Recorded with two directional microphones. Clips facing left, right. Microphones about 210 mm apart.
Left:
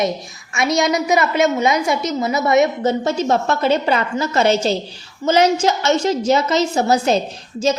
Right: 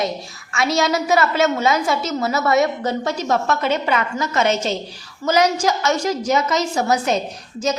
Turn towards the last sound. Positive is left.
turn(degrees=30)  # may be behind; listen again after turning